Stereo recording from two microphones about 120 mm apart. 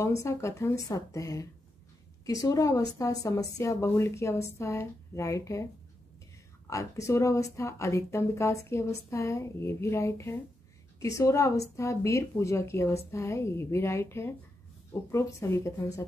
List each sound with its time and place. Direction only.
0.0 s speech: 25° left (ahead or behind)
6.7 s speech: 25° left (ahead or behind)